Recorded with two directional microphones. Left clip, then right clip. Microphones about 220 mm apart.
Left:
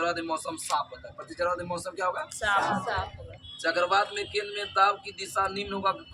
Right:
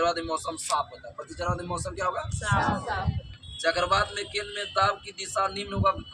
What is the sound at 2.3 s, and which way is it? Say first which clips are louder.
Speech: left 3 dB; 35° left (ahead or behind).